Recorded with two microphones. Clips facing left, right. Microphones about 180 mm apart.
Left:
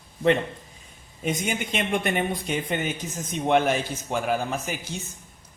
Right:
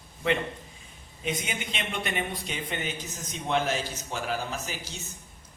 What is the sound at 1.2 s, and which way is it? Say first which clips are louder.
A man's voice: left 5 dB; 45° left (ahead or behind).